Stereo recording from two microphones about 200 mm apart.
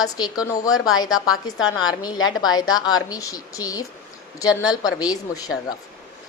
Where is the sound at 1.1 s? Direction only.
90° left.